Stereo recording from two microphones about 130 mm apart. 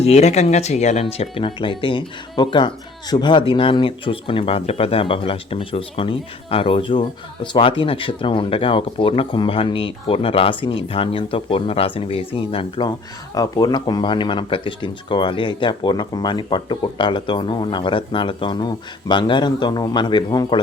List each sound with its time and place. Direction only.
0.0 s speech: 55° left (ahead or behind)
13.3 s speech: 30° left (ahead or behind)